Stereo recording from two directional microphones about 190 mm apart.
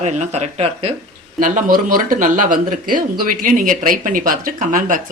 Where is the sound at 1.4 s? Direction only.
45° right (ahead or behind).